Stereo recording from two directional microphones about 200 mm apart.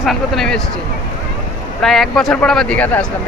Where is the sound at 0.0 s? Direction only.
Centre (ahead or behind).